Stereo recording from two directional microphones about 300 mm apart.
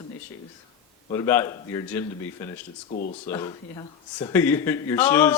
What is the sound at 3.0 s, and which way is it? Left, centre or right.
Speech, left.